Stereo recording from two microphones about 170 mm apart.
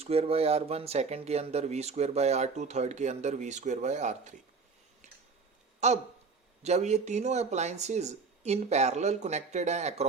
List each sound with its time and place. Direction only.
0.0 s speech: 35° right (ahead or behind)
5.8 s speech: 40° right (ahead or behind)